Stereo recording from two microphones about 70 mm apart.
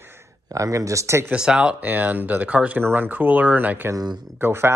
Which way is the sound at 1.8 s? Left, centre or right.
Right.